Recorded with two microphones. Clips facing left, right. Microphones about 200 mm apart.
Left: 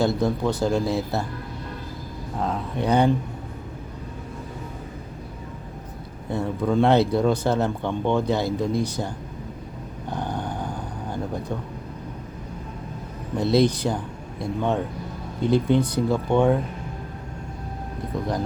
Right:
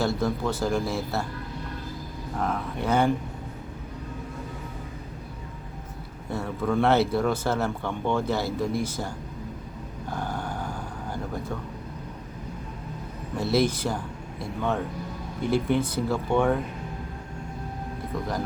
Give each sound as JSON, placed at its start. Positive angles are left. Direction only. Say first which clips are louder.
{"t": 0.0, "sound": "speech", "louder": "left 4 dB", "side_deg": 15}
{"t": 2.4, "sound": "speech", "louder": "left 3 dB", "side_deg": 15}
{"t": 6.3, "sound": "speech", "louder": "left 4 dB", "side_deg": 15}
{"t": 10.1, "sound": "a sound", "louder": "left 3 dB", "side_deg": 15}
{"t": 13.3, "sound": "speech", "louder": "left 4 dB", "side_deg": 15}